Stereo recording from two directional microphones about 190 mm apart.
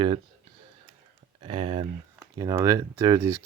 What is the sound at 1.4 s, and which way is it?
Speech, 30° right (ahead or behind).